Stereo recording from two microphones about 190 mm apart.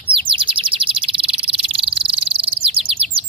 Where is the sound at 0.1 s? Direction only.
30° right (ahead or behind).